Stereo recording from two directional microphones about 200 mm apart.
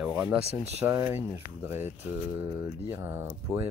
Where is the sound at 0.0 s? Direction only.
5° right (ahead or behind).